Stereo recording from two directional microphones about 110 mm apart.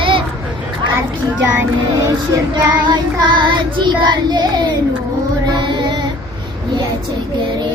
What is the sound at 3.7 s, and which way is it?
Child singing, 40° right (ahead or behind).